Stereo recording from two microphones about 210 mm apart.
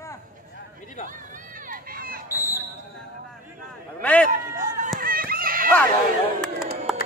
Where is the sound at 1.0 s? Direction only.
40° right (ahead or behind).